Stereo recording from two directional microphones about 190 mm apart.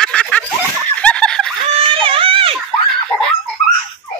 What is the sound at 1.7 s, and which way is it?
Baby cry, 30° right (ahead or behind).